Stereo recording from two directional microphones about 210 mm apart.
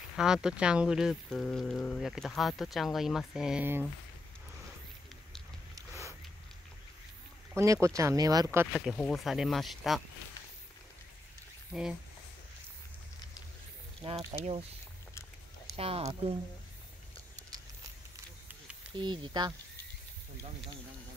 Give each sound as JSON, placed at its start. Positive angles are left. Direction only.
{"t": 0.1, "sound": "speech", "side_deg": -5}
{"t": 7.5, "sound": "speech", "side_deg": -15}
{"t": 11.7, "sound": "speech", "side_deg": 0}
{"t": 14.0, "sound": "speech", "side_deg": -30}
{"t": 15.7, "sound": "speech", "side_deg": -30}
{"t": 18.9, "sound": "speech", "side_deg": -20}